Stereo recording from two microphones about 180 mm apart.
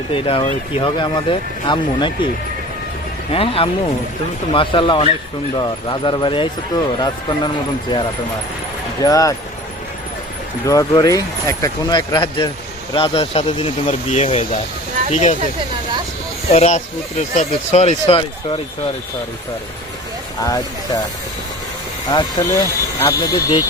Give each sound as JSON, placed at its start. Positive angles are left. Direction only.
{"t": 0.1, "sound": "speech", "side_deg": 30}
{"t": 3.3, "sound": "speech", "side_deg": 30}
{"t": 10.7, "sound": "speech", "side_deg": 20}
{"t": 16.5, "sound": "speech", "side_deg": 40}
{"t": 20.4, "sound": "speech", "side_deg": 20}
{"t": 22.1, "sound": "speech", "side_deg": 20}